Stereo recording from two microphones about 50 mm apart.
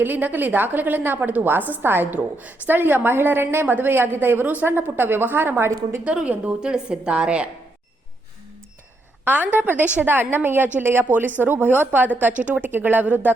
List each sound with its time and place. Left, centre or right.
0.0 s a woman's voice: right
6.2 s a woman's voice: right
9.2 s a woman's voice: right
10.1 s a woman's voice: right